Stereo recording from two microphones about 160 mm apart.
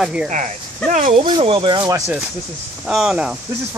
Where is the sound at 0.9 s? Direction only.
55° right (ahead or behind).